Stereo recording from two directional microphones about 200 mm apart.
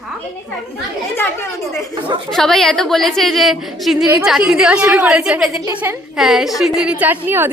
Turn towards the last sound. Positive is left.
turn(degrees=-10)  # may be behind; listen again after turning